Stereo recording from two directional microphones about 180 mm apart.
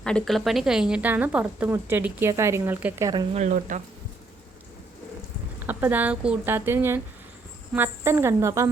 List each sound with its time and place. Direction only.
0.0 s speech: 5° left (ahead or behind); by 3.1 s 15° right (ahead or behind)
3.3 s speech: 40° right (ahead or behind)
5.5 s speech: 10° right (ahead or behind)